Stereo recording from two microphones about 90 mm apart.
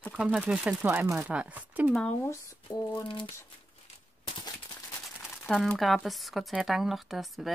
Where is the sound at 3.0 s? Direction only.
65° left (ahead or behind).